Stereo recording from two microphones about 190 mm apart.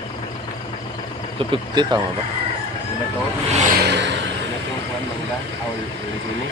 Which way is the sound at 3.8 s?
60° right (ahead or behind).